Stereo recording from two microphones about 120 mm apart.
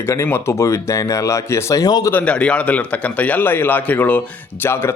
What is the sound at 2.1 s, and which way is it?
A man's voice, 10° left (ahead or behind).